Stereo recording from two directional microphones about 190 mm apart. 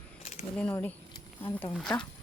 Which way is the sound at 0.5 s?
10° left (ahead or behind).